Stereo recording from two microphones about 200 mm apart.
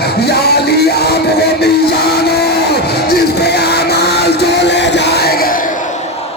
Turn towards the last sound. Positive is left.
turn(degrees=50)  # may be behind; listen again after turning